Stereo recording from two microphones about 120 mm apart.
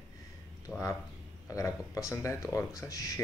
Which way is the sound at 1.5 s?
25° left (ahead or behind).